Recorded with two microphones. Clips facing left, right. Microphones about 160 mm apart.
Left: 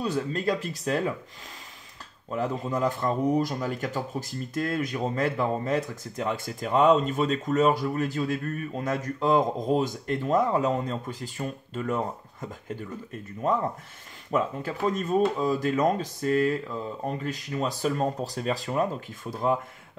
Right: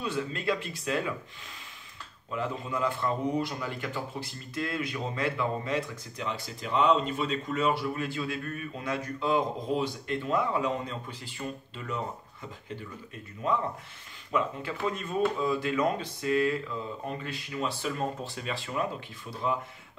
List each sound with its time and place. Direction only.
0.0 s speech: 40° left (ahead or behind)
2.3 s speech: 40° left (ahead or behind)
14.3 s speech: 40° left (ahead or behind)